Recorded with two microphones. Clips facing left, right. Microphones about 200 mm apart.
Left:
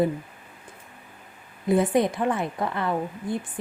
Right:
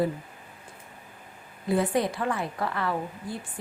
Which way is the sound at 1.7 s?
20° left (ahead or behind).